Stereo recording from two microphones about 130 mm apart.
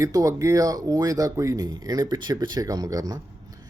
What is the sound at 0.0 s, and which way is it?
Speech, 25° right (ahead or behind).